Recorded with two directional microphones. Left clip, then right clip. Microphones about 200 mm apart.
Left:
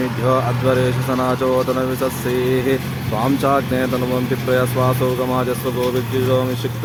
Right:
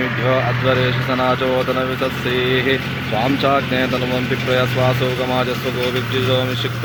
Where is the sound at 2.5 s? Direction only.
50° left (ahead or behind).